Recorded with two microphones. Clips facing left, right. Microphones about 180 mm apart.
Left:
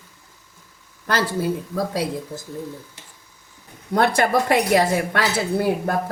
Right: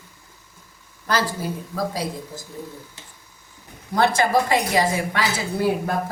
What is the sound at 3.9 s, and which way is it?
A woman's voice, 60° left (ahead or behind).